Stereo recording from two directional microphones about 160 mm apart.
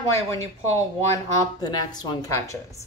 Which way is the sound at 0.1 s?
20° left (ahead or behind).